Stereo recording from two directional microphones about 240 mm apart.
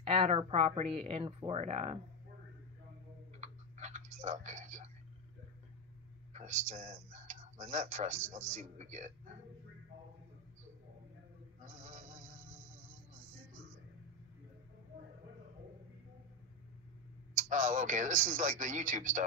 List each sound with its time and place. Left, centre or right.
0.0 s speech: right
3.3 s typing: right
6.3 s a man's voice: right
11.6 s a sound: right
17.3 s a man's voice: right